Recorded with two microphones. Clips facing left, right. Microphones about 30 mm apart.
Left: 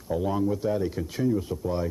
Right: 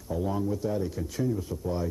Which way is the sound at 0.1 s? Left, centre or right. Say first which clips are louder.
Left 3 dB; left.